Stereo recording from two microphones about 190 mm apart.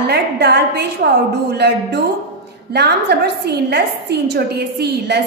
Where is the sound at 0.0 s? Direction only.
60° right (ahead or behind).